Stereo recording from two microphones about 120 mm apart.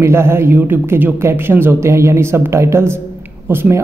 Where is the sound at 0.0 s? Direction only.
20° right (ahead or behind).